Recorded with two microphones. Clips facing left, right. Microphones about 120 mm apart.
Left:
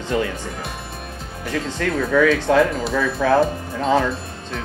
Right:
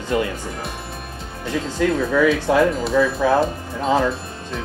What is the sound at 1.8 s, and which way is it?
Speech, 10° right (ahead or behind).